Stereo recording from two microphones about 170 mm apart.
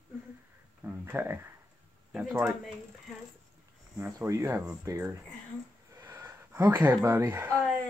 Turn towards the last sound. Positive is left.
turn(degrees=-15)  # may be behind; listen again after turning